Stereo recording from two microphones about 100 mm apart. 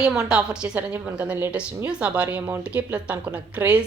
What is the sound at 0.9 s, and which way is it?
A woman's voice, 20° right (ahead or behind).